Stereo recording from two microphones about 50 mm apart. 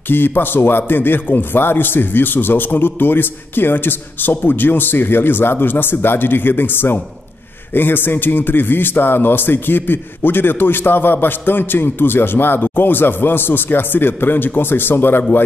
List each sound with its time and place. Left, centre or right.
0.1 s a man's voice: left